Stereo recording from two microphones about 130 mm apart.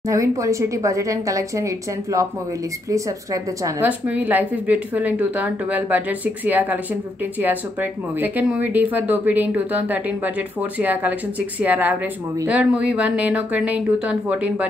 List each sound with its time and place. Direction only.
0.1 s a woman's voice: 25° right (ahead or behind)
3.8 s a woman's voice: 10° right (ahead or behind)